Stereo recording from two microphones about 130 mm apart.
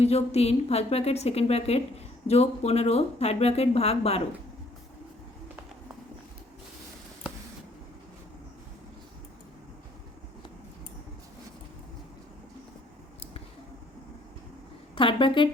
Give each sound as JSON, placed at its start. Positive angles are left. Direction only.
{"t": 0.0, "sound": "a woman's voice", "side_deg": 55}
{"t": 14.9, "sound": "a woman's voice", "side_deg": 40}